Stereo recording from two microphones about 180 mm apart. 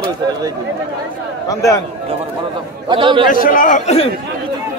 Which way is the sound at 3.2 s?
50° left (ahead or behind).